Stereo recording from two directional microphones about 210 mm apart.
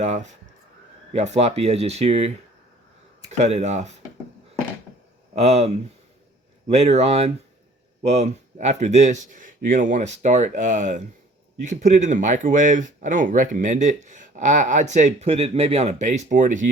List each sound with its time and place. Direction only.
0.0 s speech: 35° right (ahead or behind)
3.3 s speech: 35° right (ahead or behind)
5.3 s speech: 30° right (ahead or behind)